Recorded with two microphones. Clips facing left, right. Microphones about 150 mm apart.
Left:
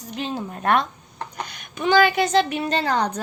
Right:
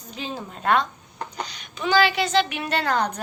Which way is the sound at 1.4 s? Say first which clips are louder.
Left 5 dB; 50° left (ahead or behind).